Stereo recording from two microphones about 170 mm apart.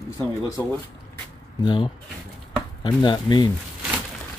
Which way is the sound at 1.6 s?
25° left (ahead or behind).